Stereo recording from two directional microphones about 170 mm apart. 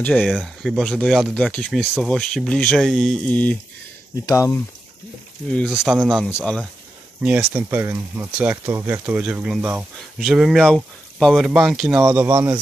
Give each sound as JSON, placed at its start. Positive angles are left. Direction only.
{"t": 0.0, "sound": "speech", "side_deg": 5}
{"t": 5.5, "sound": "speech", "side_deg": 5}
{"t": 7.2, "sound": "speech", "side_deg": -10}
{"t": 12.0, "sound": "speech", "side_deg": -15}